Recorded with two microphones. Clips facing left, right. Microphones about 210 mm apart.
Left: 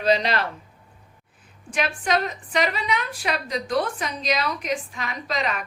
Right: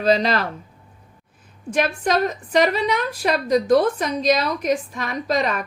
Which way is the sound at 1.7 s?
45° right (ahead or behind).